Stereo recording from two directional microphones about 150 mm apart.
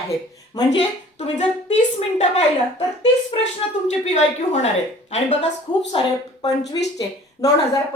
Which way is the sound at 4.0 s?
50° left (ahead or behind).